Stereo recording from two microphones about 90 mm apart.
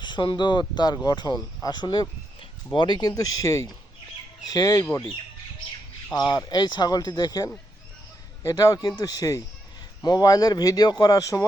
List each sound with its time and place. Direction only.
0.0 s speech: 60° left (ahead or behind); by 4.9 s 40° left (ahead or behind)
6.1 s a man's voice: 55° left (ahead or behind); by 11.4 s 35° left (ahead or behind)